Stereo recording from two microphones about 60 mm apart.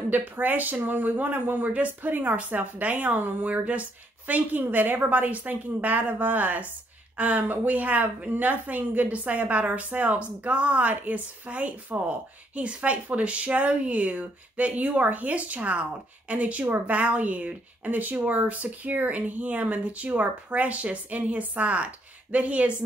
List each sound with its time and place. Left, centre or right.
0.1 s a woman's voice: right